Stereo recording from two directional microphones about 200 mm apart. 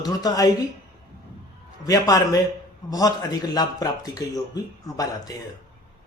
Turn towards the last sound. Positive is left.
turn(degrees=20)  # may be behind; listen again after turning